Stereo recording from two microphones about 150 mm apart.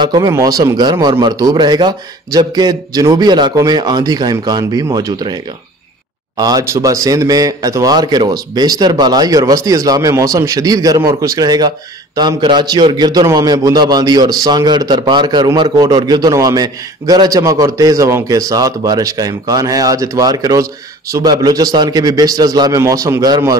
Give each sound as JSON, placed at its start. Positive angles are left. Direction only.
{"t": 0.0, "sound": "a man's voice", "side_deg": -25}